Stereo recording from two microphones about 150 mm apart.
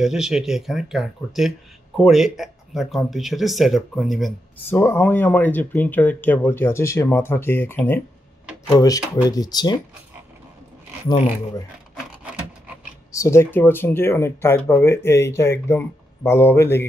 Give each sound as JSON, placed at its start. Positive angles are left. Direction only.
{"t": 0.0, "sound": "speech", "side_deg": -5}
{"t": 4.6, "sound": "speech", "side_deg": 15}
{"t": 13.1, "sound": "speech", "side_deg": 20}